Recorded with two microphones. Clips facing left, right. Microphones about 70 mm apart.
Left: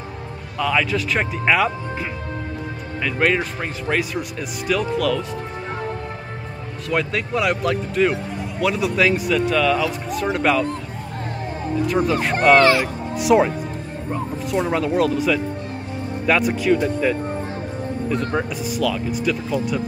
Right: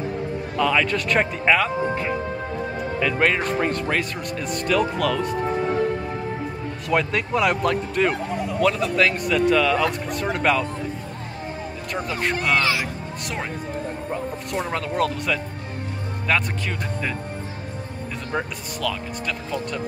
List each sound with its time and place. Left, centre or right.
0.6 s speech: centre
3.0 s speech: centre
6.9 s speech: centre
11.8 s speech: centre
12.5 s speech: left
13.2 s speech: centre
14.5 s speech: centre